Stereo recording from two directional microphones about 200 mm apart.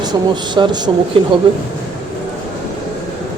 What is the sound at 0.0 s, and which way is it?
Speech, 20° right (ahead or behind).